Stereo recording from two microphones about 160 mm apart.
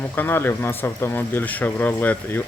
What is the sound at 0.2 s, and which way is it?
Speech, 15° left (ahead or behind).